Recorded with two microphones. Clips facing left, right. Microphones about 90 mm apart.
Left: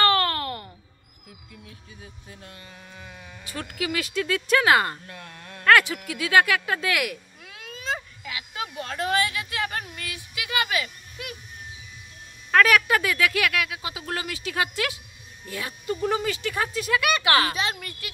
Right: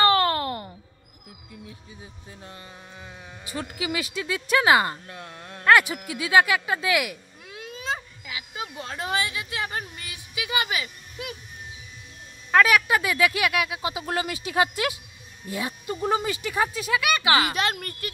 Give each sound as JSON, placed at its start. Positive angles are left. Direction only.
{"t": 0.0, "sound": "a sound", "side_deg": -20}
{"t": 3.4, "sound": "speech", "side_deg": -15}
{"t": 5.7, "sound": "cat", "side_deg": -15}
{"t": 12.4, "sound": "speech", "side_deg": -10}
{"t": 16.3, "sound": "speech", "side_deg": -10}
{"t": 17.6, "sound": "a woman's voice", "side_deg": -50}